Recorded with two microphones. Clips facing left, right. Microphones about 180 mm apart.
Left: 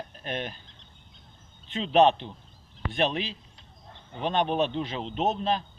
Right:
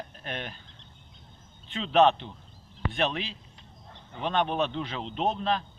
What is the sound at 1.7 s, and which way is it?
Speech, 30° left (ahead or behind).